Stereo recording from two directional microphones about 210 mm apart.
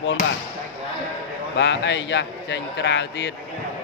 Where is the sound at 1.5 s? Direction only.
60° left (ahead or behind).